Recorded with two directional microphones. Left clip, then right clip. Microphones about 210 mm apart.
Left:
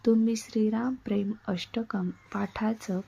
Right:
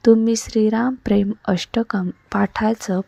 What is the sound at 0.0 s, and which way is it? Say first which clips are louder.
A woman's voice: right 11 dB; 35° right (ahead or behind).